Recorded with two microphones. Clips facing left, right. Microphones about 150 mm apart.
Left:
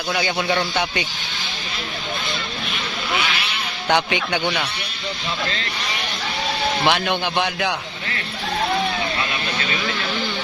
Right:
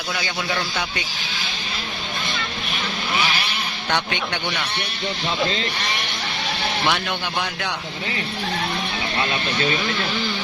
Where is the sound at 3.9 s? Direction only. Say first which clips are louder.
Left 5 dB; 5° left (ahead or behind).